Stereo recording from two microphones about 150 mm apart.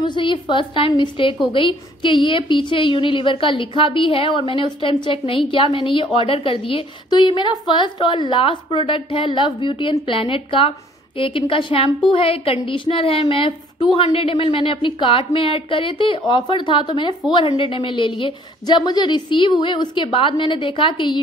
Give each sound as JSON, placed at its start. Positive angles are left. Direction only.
{"t": 0.0, "sound": "a woman's voice", "side_deg": 30}